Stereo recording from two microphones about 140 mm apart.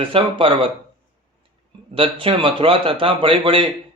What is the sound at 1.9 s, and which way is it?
A man's voice, 40° right (ahead or behind).